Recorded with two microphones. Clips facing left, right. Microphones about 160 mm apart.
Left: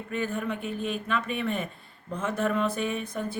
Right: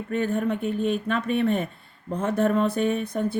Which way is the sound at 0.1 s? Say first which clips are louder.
Right 6 dB; 50° right (ahead or behind).